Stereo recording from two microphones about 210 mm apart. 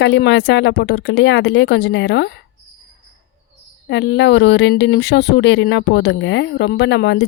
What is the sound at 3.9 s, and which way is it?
Speech, 55° left (ahead or behind).